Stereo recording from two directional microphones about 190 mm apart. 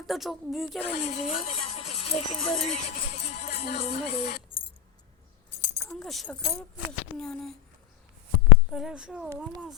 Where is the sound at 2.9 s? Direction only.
35° left (ahead or behind).